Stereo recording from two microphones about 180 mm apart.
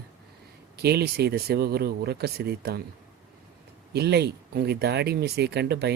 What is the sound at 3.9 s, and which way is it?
Speech, 65° right (ahead or behind).